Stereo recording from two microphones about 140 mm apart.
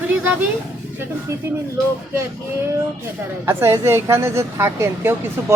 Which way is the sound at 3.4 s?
20° right (ahead or behind).